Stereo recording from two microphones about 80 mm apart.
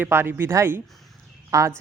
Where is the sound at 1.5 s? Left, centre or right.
Right.